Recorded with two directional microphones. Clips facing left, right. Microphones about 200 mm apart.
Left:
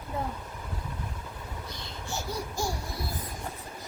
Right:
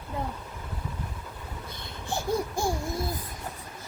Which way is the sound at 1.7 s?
55° right (ahead or behind).